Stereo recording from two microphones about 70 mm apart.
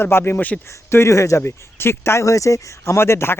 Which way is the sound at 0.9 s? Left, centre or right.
Left.